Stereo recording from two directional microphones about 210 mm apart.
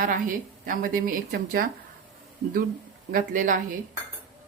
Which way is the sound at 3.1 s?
40° right (ahead or behind).